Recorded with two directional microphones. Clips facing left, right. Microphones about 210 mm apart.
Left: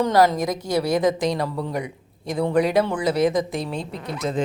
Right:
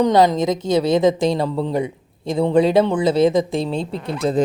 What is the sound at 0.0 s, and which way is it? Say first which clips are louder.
A woman's voice: right 3 dB; 20° right (ahead or behind).